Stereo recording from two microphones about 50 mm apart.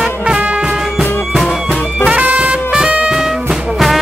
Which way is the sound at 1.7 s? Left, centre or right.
Centre.